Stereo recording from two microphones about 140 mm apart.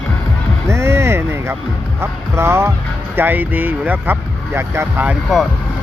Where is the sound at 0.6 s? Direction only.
20° right (ahead or behind).